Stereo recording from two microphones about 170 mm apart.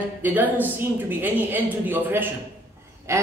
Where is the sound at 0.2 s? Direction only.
10° right (ahead or behind).